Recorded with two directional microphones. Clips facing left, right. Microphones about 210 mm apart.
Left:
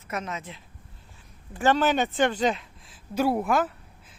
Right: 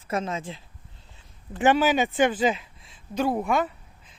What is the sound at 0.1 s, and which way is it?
Speech, 30° right (ahead or behind).